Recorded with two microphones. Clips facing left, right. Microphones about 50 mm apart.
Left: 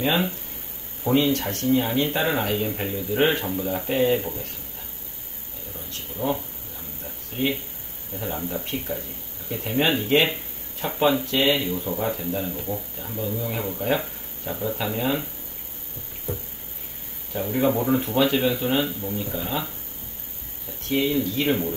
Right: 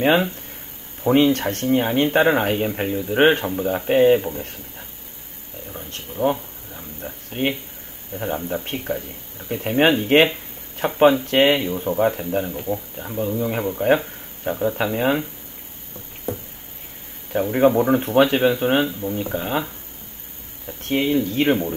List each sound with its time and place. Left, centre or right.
0.0 s speech: right
5.7 s speech: right
6.7 s a sound: right
8.1 s speech: right
12.4 s speech: right
16.3 s a sound: right
17.3 s speech: right
20.6 s speech: right